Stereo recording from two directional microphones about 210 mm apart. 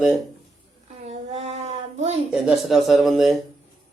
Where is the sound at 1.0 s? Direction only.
30° right (ahead or behind).